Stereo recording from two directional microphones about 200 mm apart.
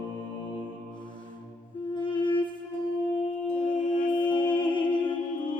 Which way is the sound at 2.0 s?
25° left (ahead or behind).